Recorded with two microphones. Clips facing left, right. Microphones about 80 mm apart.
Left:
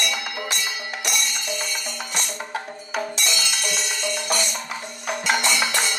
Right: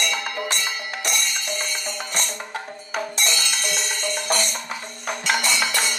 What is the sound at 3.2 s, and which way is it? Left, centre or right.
Music, right.